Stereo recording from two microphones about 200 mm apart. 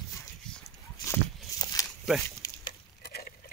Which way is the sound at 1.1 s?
20° left (ahead or behind).